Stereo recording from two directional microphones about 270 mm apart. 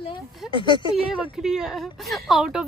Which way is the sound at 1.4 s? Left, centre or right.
Centre.